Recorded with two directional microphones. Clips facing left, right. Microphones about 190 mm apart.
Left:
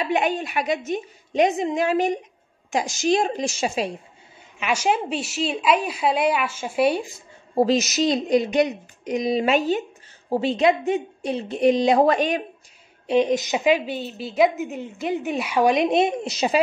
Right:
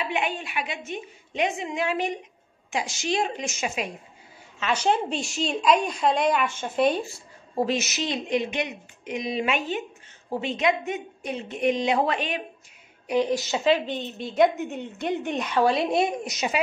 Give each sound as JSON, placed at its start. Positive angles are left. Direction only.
{"t": 0.0, "sound": "a woman's voice", "side_deg": 40}
{"t": 4.6, "sound": "a woman's voice", "side_deg": 10}
{"t": 7.5, "sound": "a woman's voice", "side_deg": 35}
{"t": 13.0, "sound": "a woman's voice", "side_deg": 25}